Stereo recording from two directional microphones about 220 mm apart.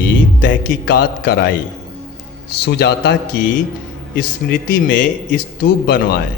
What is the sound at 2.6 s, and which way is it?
Speech, 50° left (ahead or behind).